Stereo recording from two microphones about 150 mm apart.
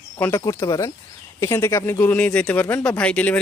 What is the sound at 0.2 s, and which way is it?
Speech, 20° left (ahead or behind).